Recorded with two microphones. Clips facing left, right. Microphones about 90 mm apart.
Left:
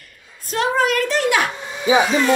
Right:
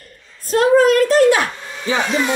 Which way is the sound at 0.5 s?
40° right (ahead or behind).